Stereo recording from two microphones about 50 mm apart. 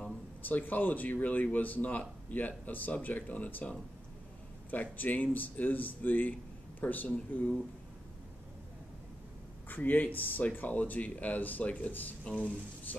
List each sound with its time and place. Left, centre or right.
0.4 s speech: left
9.7 s speech: left